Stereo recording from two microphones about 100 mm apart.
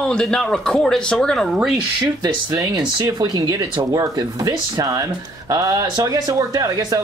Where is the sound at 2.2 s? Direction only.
40° right (ahead or behind).